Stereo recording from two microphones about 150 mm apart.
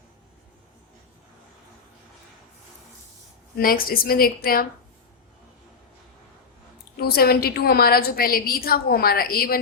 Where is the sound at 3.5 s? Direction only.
75° left (ahead or behind).